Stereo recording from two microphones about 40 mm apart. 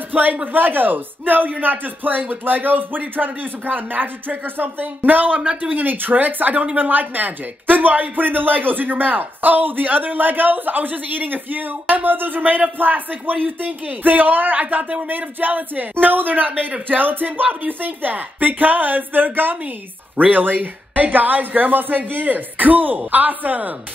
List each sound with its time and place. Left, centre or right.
0.1 s speech: right
5.4 s speech: right
5.8 s speech: right